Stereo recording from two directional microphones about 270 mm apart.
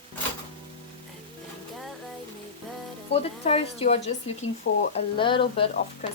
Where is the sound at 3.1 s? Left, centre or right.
Left.